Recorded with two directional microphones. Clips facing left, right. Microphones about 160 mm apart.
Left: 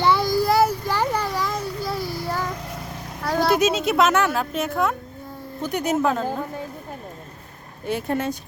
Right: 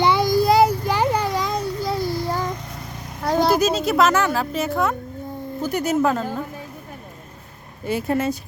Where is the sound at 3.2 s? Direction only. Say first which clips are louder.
Right 3 dB; 20° right (ahead or behind).